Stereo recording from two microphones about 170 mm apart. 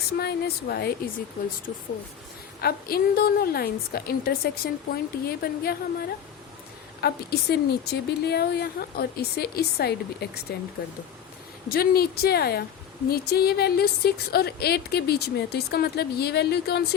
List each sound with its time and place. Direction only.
0.2 s a woman's voice: 70° left (ahead or behind)
2.6 s a woman's voice: 65° left (ahead or behind)
11.7 s a woman's voice: 65° left (ahead or behind)